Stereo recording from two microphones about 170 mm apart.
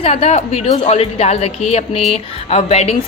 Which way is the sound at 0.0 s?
35° left (ahead or behind).